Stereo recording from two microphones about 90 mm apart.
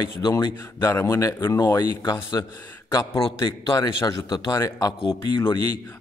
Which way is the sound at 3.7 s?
50° left (ahead or behind).